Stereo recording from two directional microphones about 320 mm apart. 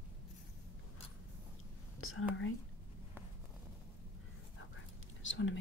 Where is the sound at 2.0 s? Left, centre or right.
Left.